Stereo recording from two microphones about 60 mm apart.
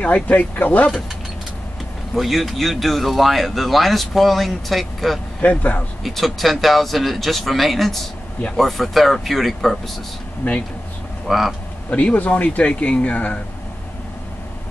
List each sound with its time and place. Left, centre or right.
0.0 s speech: left
2.1 s speech: centre
5.4 s speech: left
6.0 s speech: centre
10.4 s speech: left
11.2 s speech: centre
11.9 s speech: left